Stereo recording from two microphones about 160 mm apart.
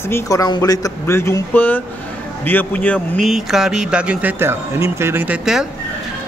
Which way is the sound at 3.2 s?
Centre (ahead or behind).